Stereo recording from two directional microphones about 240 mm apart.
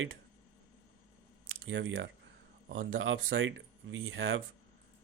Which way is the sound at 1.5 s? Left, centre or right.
Right.